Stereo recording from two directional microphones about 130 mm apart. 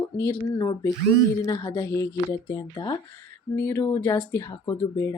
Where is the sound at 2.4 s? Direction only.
35° left (ahead or behind).